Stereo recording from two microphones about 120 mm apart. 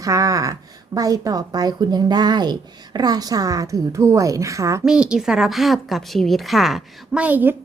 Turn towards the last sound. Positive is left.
turn(degrees=-15)  # may be behind; listen again after turning